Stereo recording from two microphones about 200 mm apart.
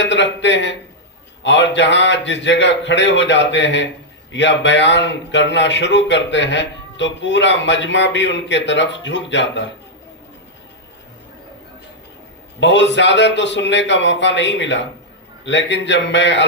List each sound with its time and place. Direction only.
0.0 s a man's voice: 60° left (ahead or behind)
12.5 s a man's voice: 60° left (ahead or behind)